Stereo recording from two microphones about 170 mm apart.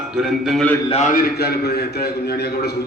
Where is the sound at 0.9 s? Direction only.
45° left (ahead or behind); by 2.7 s 70° left (ahead or behind).